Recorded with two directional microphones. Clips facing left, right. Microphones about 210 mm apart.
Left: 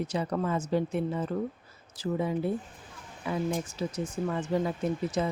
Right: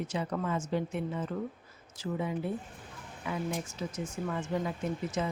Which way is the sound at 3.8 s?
35° left (ahead or behind).